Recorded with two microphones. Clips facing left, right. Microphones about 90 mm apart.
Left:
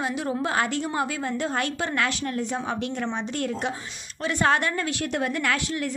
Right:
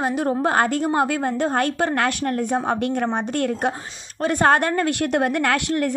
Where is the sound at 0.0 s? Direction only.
45° right (ahead or behind).